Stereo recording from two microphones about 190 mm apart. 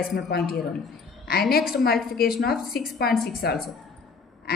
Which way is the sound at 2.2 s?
55° left (ahead or behind).